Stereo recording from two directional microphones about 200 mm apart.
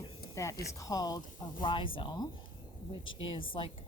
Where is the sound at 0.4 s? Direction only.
15° left (ahead or behind).